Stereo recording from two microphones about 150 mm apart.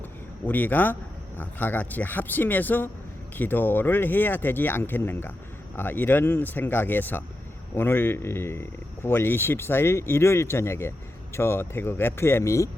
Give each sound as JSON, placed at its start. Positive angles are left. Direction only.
{"t": 0.4, "sound": "speech", "side_deg": 10}